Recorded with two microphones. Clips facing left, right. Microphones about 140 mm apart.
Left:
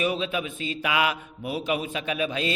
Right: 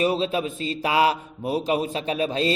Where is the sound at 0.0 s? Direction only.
35° right (ahead or behind).